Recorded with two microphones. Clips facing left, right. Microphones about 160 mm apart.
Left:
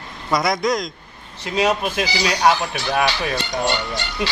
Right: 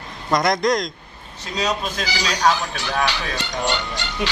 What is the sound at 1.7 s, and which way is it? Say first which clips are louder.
Speech: left 4 dB; 15° left (ahead or behind).